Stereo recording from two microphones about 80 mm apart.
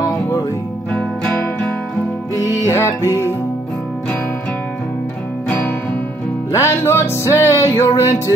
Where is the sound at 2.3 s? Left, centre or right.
Left.